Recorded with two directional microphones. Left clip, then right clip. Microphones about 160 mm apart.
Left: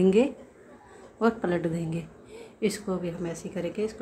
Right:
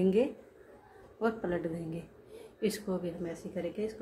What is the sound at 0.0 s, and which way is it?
A woman's voice, 20° left (ahead or behind).